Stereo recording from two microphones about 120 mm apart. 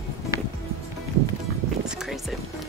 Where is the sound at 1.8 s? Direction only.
5° right (ahead or behind).